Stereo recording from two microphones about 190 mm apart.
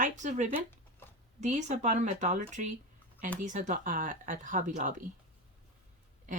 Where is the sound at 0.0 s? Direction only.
40° right (ahead or behind).